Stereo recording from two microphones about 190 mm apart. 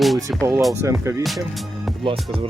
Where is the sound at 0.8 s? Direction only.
15° right (ahead or behind).